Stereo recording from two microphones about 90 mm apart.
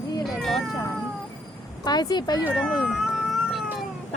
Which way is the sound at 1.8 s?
50° left (ahead or behind).